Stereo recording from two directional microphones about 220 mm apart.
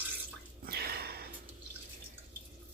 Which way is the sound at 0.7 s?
45° right (ahead or behind).